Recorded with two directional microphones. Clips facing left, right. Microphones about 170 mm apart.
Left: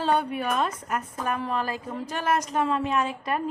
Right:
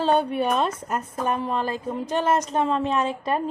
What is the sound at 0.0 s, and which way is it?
A woman's voice, 25° right (ahead or behind).